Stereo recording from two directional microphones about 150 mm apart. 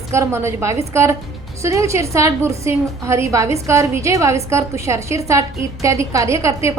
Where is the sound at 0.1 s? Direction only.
20° right (ahead or behind).